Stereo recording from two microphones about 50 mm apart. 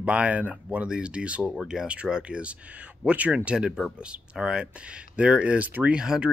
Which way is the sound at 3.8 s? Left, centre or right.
Centre.